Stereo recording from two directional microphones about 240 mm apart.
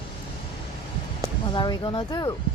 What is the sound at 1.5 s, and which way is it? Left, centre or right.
Speech, centre.